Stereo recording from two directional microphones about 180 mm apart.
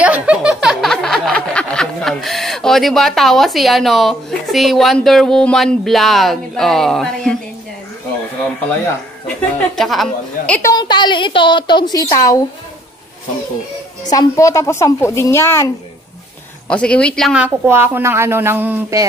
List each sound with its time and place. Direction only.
0.0 s snicker: 5° right (ahead or behind)
9.8 s a woman's voice: centre (ahead or behind)
10.7 s a woman's voice: 25° left (ahead or behind)
14.0 s a woman's voice: 20° left (ahead or behind); by 17.5 s centre (ahead or behind)
17.6 s speech: 10° right (ahead or behind)